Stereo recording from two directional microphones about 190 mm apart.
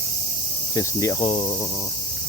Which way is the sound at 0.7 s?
15° left (ahead or behind).